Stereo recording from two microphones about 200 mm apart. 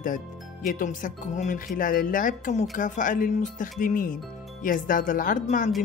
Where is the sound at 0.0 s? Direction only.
40° left (ahead or behind).